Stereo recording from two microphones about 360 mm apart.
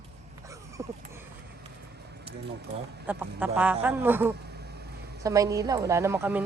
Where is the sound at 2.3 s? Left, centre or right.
Centre.